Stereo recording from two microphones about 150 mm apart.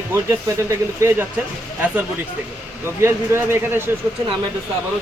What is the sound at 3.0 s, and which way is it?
Speech, 15° right (ahead or behind).